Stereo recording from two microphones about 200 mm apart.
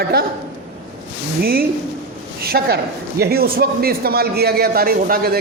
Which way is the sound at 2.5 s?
50° right (ahead or behind).